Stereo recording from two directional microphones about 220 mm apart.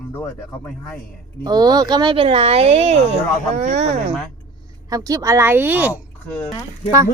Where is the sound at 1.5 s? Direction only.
20° right (ahead or behind).